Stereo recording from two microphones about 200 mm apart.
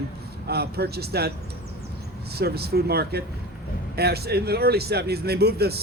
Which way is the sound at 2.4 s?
50° right (ahead or behind).